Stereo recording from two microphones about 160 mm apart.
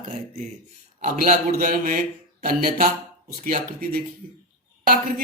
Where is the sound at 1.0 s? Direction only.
55° right (ahead or behind).